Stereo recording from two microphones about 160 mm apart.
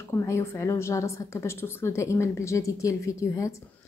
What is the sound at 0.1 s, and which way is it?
A woman's voice, 15° left (ahead or behind).